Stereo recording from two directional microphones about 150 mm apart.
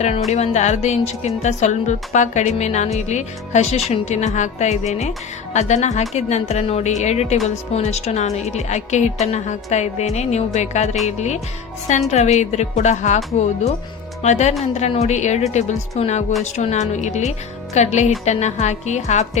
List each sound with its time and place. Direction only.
0.3 s speech: 45° left (ahead or behind)
14.2 s speech: 50° left (ahead or behind)